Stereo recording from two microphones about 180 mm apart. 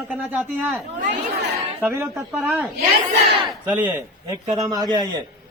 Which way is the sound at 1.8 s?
5° right (ahead or behind).